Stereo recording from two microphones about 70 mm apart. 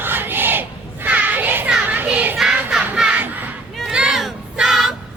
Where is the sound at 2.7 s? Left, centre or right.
Centre.